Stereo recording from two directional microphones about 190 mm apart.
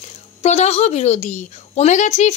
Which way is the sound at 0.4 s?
35° left (ahead or behind).